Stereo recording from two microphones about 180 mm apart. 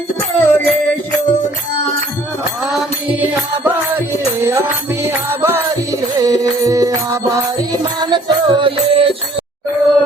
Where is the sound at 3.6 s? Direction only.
15° right (ahead or behind); by 9.1 s 30° right (ahead or behind).